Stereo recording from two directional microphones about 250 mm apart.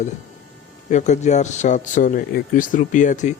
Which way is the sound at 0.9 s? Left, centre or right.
Left.